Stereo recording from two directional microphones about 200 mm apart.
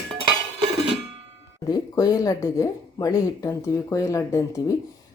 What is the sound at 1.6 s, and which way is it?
A woman's voice, 20° left (ahead or behind).